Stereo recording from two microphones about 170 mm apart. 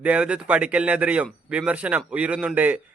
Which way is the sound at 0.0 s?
10° right (ahead or behind).